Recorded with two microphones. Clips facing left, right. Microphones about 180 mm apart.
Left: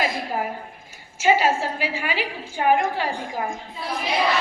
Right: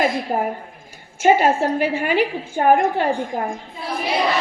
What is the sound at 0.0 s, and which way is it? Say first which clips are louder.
A woman's voice: right 5 dB; 50° right (ahead or behind).